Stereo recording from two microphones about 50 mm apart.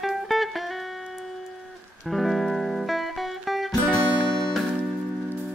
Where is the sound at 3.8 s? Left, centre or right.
Centre.